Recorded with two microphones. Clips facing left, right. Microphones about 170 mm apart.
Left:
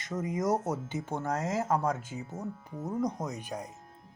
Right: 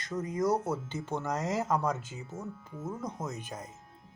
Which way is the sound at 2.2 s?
35° left (ahead or behind).